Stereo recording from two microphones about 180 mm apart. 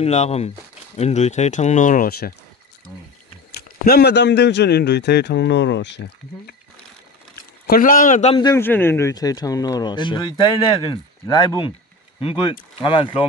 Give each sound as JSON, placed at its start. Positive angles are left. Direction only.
{"t": 0.0, "sound": "speech", "side_deg": 35}
{"t": 3.8, "sound": "a man's voice", "side_deg": 60}
{"t": 7.6, "sound": "speech", "side_deg": 50}
{"t": 8.4, "sound": "speech", "side_deg": 20}
{"t": 8.6, "sound": "speech", "side_deg": 10}
{"t": 12.8, "sound": "speech", "side_deg": 30}